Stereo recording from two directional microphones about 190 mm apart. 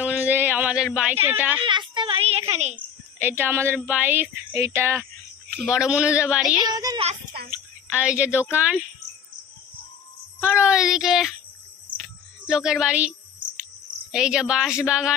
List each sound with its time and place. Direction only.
0.0 s a sound: 10° right (ahead or behind)
1.6 s a sound: 25° right (ahead or behind)
3.2 s speech: 10° right (ahead or behind)
6.7 s speech: 20° right (ahead or behind)
7.3 s a sound: 55° right (ahead or behind)
7.9 s speech: 5° right (ahead or behind)
10.4 s speech: 5° right (ahead or behind)
12.0 s cricket: 5° right (ahead or behind)
14.1 s speech: 5° right (ahead or behind)